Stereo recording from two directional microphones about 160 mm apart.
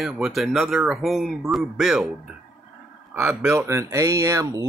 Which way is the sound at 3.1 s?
15° right (ahead or behind).